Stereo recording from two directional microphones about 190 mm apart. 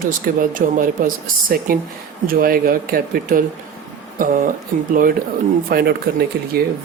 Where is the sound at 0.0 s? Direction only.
45° right (ahead or behind).